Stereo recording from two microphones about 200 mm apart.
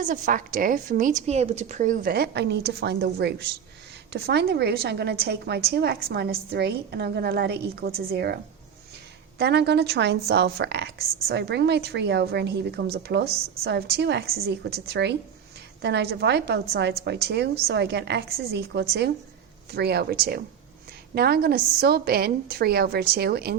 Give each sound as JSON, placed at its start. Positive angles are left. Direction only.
{"t": 0.0, "sound": "a woman's voice", "side_deg": -40}
{"t": 9.4, "sound": "a woman's voice", "side_deg": -55}